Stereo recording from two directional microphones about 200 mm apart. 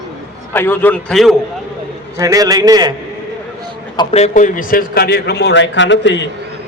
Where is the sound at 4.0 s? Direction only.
30° left (ahead or behind); by 6.3 s 65° left (ahead or behind).